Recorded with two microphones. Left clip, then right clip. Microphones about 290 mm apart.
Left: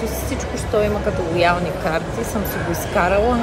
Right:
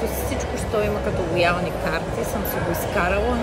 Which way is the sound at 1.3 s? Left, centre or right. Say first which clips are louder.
Left 3 dB; centre.